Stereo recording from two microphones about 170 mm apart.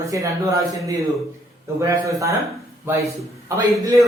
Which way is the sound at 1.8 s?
20° right (ahead or behind).